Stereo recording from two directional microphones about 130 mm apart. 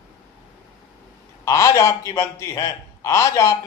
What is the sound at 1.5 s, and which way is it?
A man's voice, 25° left (ahead or behind).